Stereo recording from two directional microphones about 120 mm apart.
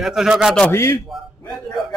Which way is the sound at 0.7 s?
25° left (ahead or behind).